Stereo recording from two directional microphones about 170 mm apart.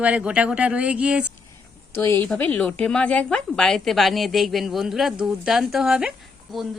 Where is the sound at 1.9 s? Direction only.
15° left (ahead or behind).